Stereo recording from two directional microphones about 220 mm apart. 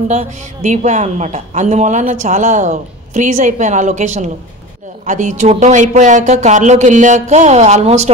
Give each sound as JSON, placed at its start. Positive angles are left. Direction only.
{"t": 0.1, "sound": "speech", "side_deg": -30}